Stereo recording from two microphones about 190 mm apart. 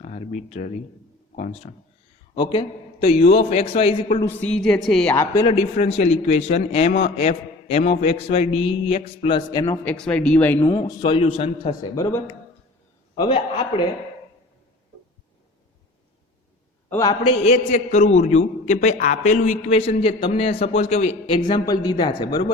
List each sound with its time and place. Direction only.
0.0 s a sound: 40° left (ahead or behind)
1.4 s speech: 45° left (ahead or behind)
2.3 s a man's voice: 25° left (ahead or behind)
4.2 s a woman's voice: 10° left (ahead or behind)
5.1 s a man's voice: 15° left (ahead or behind); by 9.4 s 35° left (ahead or behind)
9.5 s a man's voice: 20° left (ahead or behind)
9.8 s speech: 5° left (ahead or behind)
10.8 s a man's voice: 20° left (ahead or behind)
11.1 s a man's voice: 30° left (ahead or behind)
11.7 s speech: 15° left (ahead or behind)
13.2 s a man's voice: 30° left (ahead or behind)
16.9 s speech: 20° left (ahead or behind)
17.4 s a man's voice: 40° left (ahead or behind); by 22.5 s 20° left (ahead or behind)